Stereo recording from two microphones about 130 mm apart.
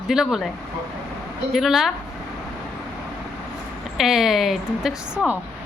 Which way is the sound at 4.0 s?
5° right (ahead or behind).